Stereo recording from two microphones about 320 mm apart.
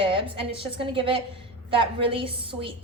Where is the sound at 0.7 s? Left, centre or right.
Centre.